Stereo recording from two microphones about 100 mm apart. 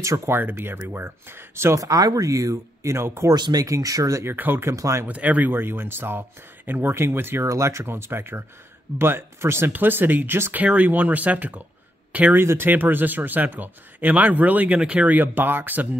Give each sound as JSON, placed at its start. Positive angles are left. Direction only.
{"t": 0.0, "sound": "speech", "side_deg": -30}
{"t": 3.3, "sound": "speech", "side_deg": -45}
{"t": 5.0, "sound": "speech", "side_deg": -15}